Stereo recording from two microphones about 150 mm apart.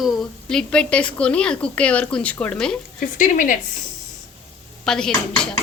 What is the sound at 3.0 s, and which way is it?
Speech, 60° left (ahead or behind).